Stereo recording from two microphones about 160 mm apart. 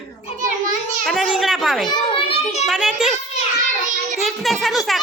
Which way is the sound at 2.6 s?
5° right (ahead or behind).